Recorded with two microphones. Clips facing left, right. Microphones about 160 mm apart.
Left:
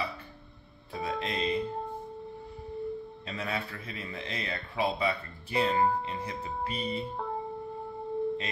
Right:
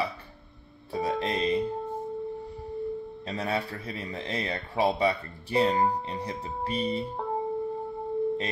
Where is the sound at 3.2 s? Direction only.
35° right (ahead or behind).